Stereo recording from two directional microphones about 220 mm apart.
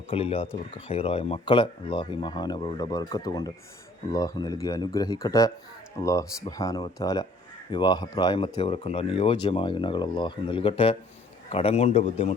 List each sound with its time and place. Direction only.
0.1 s speech: 25° left (ahead or behind)